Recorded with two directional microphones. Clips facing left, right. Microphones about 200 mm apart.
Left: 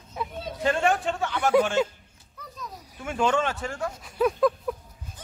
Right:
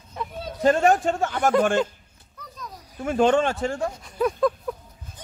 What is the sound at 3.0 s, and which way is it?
Speech, 35° right (ahead or behind).